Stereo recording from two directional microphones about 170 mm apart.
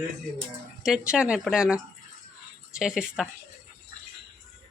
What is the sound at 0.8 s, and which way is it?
Speech, 5° right (ahead or behind).